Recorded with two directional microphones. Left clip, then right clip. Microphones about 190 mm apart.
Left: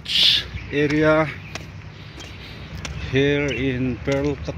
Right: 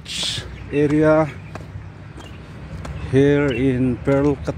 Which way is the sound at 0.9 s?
10° right (ahead or behind).